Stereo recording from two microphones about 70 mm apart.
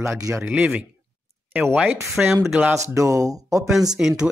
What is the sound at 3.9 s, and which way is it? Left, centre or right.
Speech, centre.